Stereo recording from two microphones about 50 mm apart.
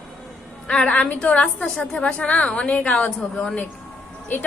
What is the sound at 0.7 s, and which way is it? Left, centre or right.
A woman's voice, left.